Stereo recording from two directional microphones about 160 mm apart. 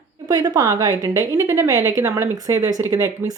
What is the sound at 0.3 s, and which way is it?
Speech, 25° right (ahead or behind).